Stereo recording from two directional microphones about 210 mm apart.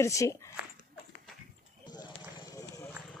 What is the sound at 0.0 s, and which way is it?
Speech, 15° left (ahead or behind).